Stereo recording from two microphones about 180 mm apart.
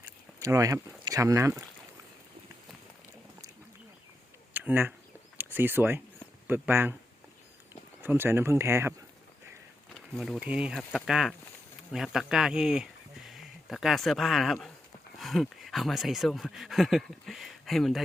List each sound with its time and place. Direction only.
0.0 s speech: 15° right (ahead or behind)
4.5 s speech: 10° right (ahead or behind)
8.0 s speech: 10° right (ahead or behind)
9.9 s speech: centre (ahead or behind)